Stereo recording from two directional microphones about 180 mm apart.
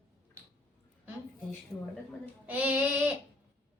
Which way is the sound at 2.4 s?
10° right (ahead or behind).